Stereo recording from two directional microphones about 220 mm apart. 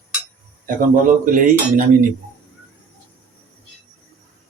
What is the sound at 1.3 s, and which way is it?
Speech, 35° right (ahead or behind).